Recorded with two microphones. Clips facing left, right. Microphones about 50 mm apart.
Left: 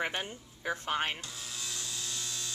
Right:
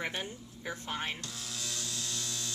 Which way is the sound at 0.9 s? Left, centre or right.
Left.